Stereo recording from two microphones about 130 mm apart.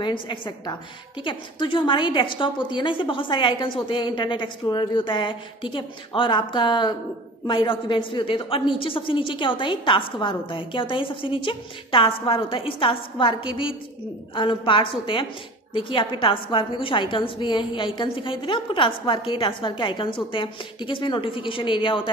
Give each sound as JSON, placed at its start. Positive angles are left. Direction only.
{"t": 0.0, "sound": "a woman's voice", "side_deg": 40}